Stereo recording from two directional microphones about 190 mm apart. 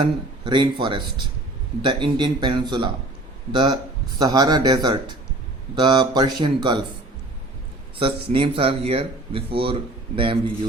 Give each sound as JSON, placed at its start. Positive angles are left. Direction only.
{"t": 0.0, "sound": "speech", "side_deg": -25}
{"t": 7.9, "sound": "speech", "side_deg": -30}